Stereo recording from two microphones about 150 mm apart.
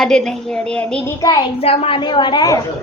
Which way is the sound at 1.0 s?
25° left (ahead or behind).